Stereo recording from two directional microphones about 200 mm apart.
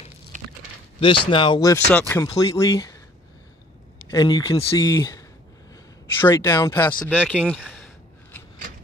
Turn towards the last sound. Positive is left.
turn(degrees=0)  # may be behind; listen again after turning